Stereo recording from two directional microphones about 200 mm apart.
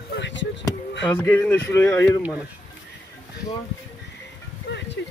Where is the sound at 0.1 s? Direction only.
65° left (ahead or behind).